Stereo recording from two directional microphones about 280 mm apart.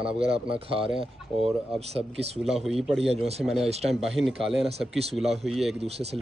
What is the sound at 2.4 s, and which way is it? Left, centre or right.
Speech, centre.